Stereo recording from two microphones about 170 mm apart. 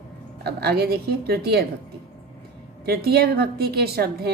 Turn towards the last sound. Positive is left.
turn(degrees=-65)  # may be behind; listen again after turning